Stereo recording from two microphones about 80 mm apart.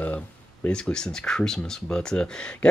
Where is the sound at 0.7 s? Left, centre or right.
Centre.